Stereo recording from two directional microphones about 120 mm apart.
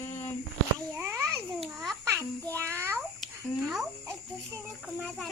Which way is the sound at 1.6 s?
Centre (ahead or behind).